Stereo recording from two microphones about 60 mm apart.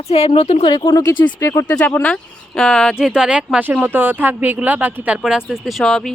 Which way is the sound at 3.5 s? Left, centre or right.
Right.